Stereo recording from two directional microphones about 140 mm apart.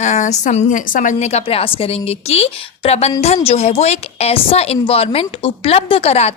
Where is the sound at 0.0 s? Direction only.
55° left (ahead or behind).